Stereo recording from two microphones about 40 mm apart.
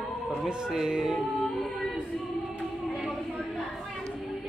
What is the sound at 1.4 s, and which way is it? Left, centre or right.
Music, centre.